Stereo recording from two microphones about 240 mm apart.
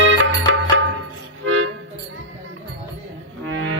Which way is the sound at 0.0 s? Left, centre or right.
Right.